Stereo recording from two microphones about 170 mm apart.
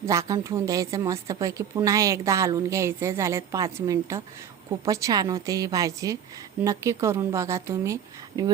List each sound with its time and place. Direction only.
0.0 s a woman's voice: 20° right (ahead or behind)